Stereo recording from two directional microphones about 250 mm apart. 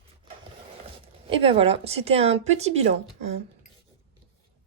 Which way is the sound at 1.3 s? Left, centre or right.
Right.